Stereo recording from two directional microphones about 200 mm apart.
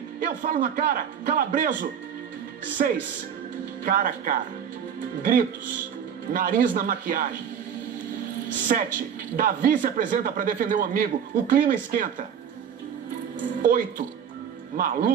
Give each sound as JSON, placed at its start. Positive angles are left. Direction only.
{"t": 0.2, "sound": "speech", "side_deg": -40}
{"t": 8.7, "sound": "speech", "side_deg": -45}
{"t": 13.6, "sound": "speech", "side_deg": -45}